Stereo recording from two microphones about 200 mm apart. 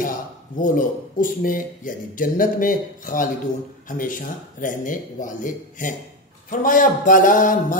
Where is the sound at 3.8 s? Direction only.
40° left (ahead or behind).